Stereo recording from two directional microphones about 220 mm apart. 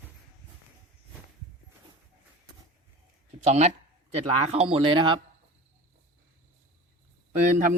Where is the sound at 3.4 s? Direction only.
30° right (ahead or behind).